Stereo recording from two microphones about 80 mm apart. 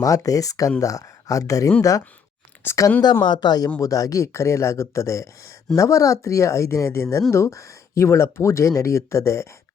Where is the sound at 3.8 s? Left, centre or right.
Left.